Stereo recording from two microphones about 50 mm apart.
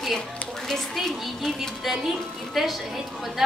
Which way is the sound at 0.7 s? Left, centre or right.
Centre.